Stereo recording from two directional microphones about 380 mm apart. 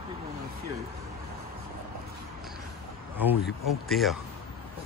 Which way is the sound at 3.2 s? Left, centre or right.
Centre.